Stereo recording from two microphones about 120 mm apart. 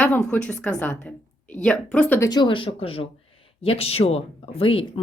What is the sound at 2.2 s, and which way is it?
Speech, 35° left (ahead or behind).